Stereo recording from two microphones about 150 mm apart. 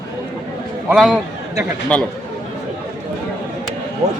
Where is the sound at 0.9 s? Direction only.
Centre (ahead or behind).